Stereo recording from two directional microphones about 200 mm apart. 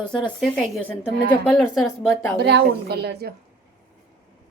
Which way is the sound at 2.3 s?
55° right (ahead or behind).